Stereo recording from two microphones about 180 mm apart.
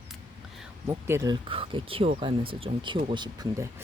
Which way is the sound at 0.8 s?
15° right (ahead or behind).